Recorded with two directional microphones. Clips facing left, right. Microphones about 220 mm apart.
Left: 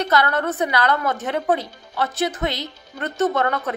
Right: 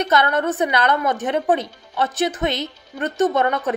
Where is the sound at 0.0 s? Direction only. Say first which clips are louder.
Right 1 dB; 20° right (ahead or behind).